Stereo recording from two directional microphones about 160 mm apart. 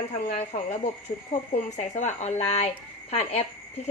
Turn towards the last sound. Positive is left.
turn(degrees=40)  # may be behind; listen again after turning